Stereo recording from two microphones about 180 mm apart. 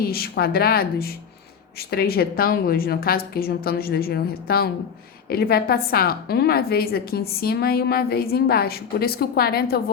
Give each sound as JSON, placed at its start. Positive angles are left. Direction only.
{"t": 0.0, "sound": "a woman's voice", "side_deg": 60}